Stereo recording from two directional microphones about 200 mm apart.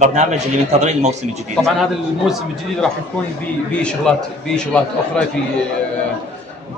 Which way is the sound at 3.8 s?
5° left (ahead or behind).